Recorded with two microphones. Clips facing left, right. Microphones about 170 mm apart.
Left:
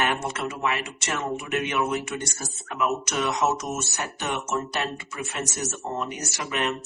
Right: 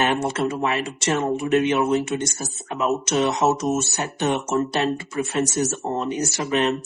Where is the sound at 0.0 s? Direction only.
30° right (ahead or behind).